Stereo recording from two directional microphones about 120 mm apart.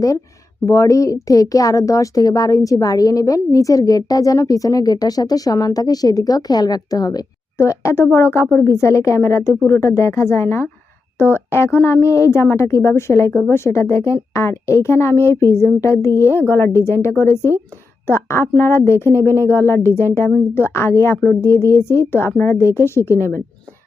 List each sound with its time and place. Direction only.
0.6 s speech: 25° left (ahead or behind)